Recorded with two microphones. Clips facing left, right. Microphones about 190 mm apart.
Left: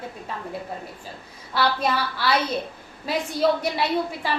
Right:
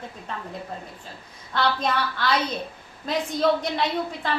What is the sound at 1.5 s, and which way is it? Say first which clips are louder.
A woman's voice: left 1 dB; 10° left (ahead or behind).